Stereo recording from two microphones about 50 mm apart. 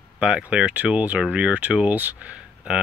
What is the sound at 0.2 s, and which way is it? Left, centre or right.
Speech, centre.